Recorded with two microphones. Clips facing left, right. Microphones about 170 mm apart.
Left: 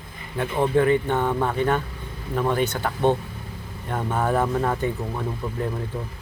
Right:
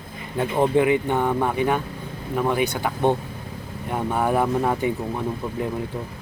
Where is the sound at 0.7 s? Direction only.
10° right (ahead or behind).